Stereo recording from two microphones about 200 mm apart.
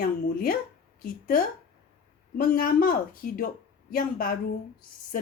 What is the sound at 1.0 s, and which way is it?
Speech, 45° left (ahead or behind).